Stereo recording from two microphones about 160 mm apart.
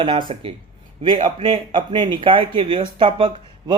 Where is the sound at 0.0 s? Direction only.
30° right (ahead or behind).